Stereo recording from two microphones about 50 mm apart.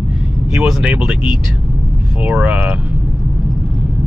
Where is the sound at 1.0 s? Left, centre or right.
Right.